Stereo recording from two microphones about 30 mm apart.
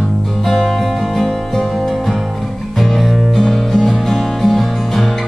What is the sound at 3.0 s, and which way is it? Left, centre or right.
Music, centre.